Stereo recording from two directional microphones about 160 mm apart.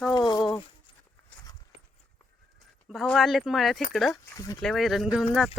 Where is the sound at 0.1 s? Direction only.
25° left (ahead or behind).